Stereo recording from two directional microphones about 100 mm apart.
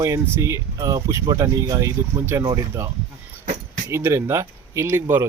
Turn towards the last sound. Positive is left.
turn(degrees=-25)  # may be behind; listen again after turning